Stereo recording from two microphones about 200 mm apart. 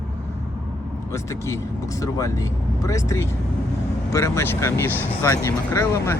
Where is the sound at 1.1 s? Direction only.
15° left (ahead or behind).